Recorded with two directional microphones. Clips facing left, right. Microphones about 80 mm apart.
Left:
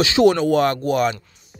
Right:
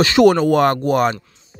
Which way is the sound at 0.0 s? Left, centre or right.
Right.